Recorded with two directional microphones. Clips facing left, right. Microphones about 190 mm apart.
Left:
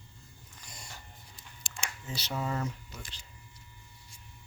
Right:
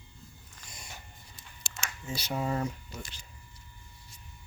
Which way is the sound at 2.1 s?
10° right (ahead or behind).